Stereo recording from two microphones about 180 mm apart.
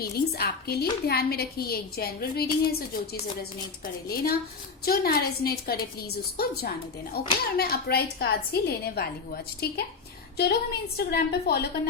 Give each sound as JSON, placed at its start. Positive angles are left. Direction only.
{"t": 0.0, "sound": "a woman's voice", "side_deg": 60}